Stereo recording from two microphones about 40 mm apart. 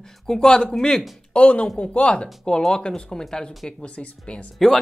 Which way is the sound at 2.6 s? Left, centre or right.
Centre.